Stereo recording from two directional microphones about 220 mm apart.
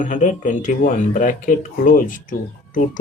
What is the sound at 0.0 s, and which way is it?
Speech, 35° left (ahead or behind).